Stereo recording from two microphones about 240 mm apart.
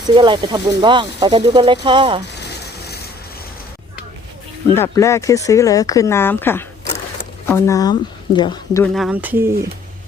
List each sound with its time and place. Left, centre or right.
0.1 s speech: centre
2.4 s a sound: left
4.7 s speech: centre
8.8 s speech: centre